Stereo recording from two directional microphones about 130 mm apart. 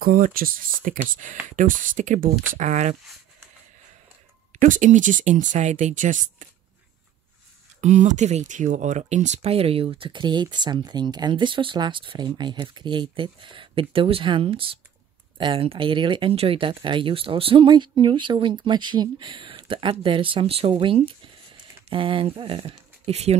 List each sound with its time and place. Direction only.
0.0 s speech: 90° right; by 3.0 s 65° right (ahead or behind)
4.6 s speech: 75° right (ahead or behind)
7.8 s speech: 65° right (ahead or behind)